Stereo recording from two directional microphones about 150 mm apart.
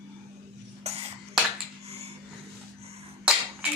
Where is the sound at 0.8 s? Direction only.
45° right (ahead or behind).